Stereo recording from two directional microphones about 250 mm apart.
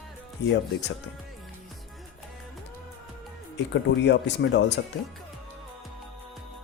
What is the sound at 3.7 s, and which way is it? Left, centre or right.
Speech, left.